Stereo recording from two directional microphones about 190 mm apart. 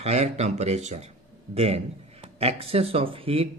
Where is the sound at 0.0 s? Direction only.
35° right (ahead or behind).